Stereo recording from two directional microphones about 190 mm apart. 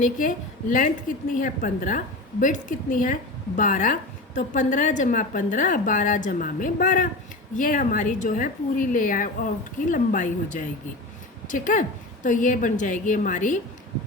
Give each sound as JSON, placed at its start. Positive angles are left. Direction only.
{"t": 0.0, "sound": "a woman's voice", "side_deg": 45}